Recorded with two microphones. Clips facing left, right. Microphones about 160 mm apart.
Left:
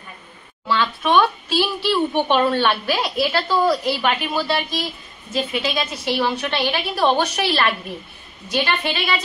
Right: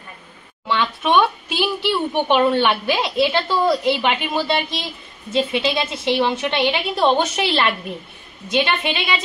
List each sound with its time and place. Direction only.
0.7 s a child's voice: 15° right (ahead or behind)